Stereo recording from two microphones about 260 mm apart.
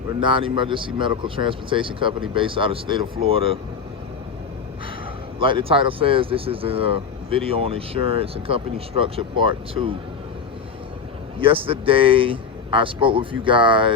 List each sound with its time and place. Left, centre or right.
0.2 s speech: centre
5.4 s speech: centre
11.3 s speech: right